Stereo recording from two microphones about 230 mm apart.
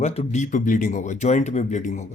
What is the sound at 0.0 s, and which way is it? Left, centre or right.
Speech, left.